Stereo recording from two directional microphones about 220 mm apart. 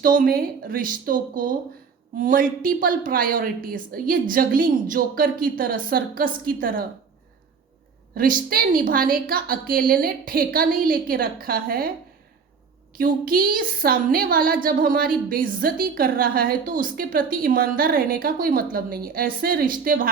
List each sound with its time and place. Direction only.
0.0 s a woman's voice: 40° right (ahead or behind)
8.1 s a woman's voice: 40° right (ahead or behind)
13.0 s a woman's voice: 40° right (ahead or behind)